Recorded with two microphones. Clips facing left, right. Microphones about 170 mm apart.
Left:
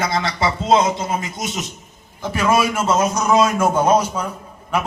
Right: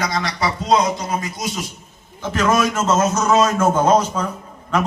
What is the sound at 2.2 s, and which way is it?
A man's voice, 10° left (ahead or behind).